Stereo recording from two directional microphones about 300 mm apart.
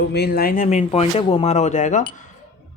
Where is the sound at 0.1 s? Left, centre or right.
Left.